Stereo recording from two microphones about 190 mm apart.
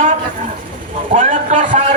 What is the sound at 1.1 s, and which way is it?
Speech, 40° right (ahead or behind).